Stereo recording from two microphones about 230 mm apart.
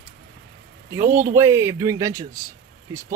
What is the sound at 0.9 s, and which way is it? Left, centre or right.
Speech, centre.